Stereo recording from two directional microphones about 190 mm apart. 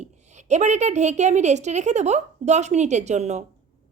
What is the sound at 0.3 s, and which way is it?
A woman's voice, 40° right (ahead or behind).